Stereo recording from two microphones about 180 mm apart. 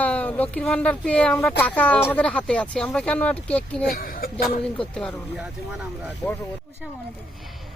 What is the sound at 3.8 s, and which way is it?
Speech, 50° left (ahead or behind).